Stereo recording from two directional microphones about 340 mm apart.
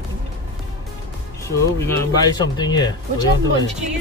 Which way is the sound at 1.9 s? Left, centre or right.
Centre.